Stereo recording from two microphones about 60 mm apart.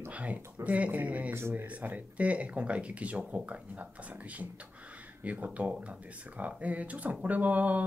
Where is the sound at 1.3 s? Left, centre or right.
Right.